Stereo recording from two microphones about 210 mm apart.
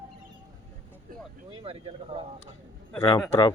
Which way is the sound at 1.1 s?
40° right (ahead or behind).